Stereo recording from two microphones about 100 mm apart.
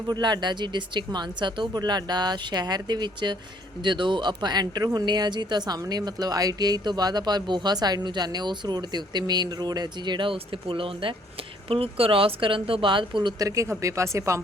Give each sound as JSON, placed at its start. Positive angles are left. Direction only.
{"t": 0.1, "sound": "speech", "side_deg": -45}
{"t": 13.4, "sound": "a woman's voice", "side_deg": -30}